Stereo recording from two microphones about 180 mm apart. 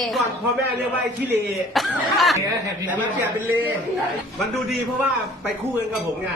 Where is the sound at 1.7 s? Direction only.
Centre (ahead or behind).